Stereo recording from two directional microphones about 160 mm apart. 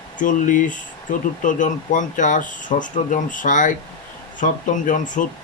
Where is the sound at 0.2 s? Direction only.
55° left (ahead or behind).